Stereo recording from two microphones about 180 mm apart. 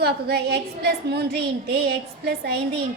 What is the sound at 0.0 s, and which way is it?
A woman's voice, 65° right (ahead or behind).